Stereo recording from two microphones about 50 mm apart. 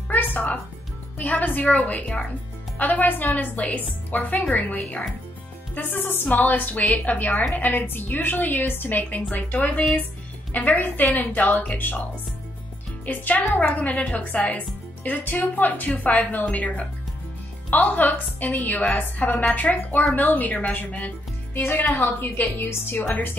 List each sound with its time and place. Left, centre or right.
0.1 s music: left
1.1 s a woman's voice: left
5.9 s a woman's voice: left
6.2 s a woman's voice: left
13.0 s a woman's voice: left
21.5 s a woman's voice: left